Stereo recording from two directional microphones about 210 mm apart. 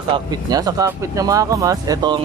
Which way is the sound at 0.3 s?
15° right (ahead or behind).